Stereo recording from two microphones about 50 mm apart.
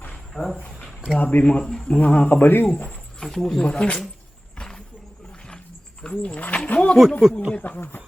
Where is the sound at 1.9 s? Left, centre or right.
Left.